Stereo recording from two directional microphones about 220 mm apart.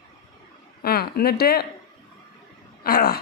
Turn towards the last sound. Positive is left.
turn(degrees=40)  # may be behind; listen again after turning